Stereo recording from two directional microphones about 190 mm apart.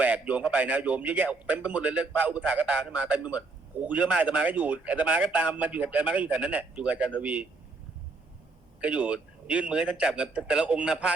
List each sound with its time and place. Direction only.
0.0 s a man's voice: 5° right (ahead or behind)
8.8 s a man's voice: 5° right (ahead or behind)